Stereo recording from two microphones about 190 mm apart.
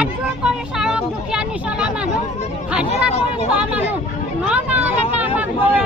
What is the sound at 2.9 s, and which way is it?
Speech, 35° left (ahead or behind).